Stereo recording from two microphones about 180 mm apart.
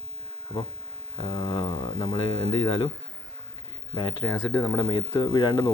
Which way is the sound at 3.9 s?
25° left (ahead or behind).